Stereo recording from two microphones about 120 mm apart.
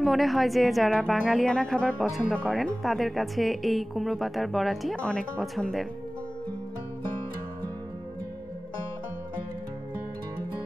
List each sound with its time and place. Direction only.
0.0 s speech: centre (ahead or behind)